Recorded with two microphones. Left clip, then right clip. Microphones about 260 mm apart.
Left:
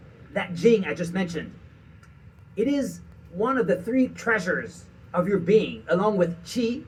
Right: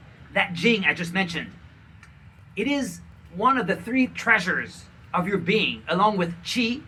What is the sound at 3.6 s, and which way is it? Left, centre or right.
A man's voice, centre.